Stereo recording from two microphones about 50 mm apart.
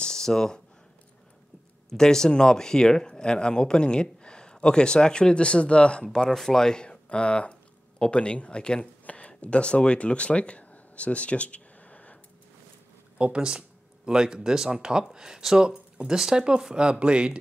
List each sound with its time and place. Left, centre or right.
0.0 s a sound: centre
1.9 s speech: centre
6.3 s speech: centre; by 12.2 s left
13.2 s speech: centre